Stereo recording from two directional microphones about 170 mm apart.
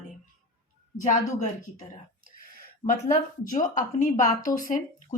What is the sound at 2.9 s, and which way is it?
Speech, 50° left (ahead or behind).